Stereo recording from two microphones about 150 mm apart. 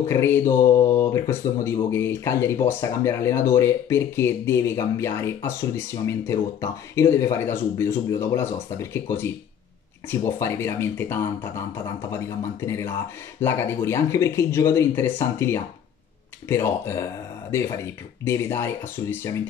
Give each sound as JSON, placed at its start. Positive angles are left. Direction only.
{"t": 0.0, "sound": "speech", "side_deg": 15}
{"t": 10.0, "sound": "speech", "side_deg": 15}